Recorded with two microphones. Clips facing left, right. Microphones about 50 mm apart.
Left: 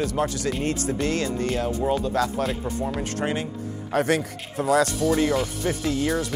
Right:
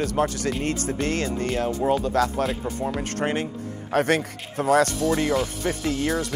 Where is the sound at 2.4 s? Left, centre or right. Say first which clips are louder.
Right 1 dB; centre.